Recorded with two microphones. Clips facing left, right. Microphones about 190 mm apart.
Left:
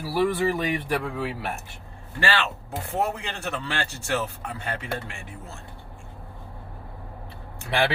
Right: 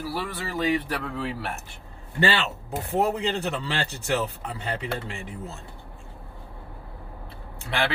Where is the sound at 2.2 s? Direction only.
20° right (ahead or behind).